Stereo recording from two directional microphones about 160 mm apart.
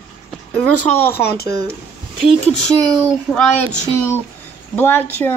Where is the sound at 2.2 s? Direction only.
5° left (ahead or behind).